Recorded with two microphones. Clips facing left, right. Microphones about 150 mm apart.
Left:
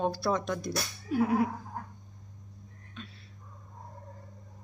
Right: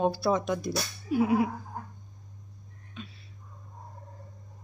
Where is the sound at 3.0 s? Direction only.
5° right (ahead or behind).